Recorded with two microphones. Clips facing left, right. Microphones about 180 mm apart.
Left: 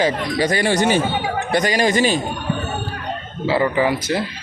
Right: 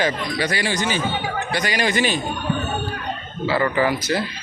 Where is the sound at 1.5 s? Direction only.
40° left (ahead or behind).